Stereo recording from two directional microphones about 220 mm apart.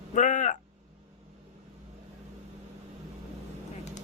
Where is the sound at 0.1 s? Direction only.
35° left (ahead or behind).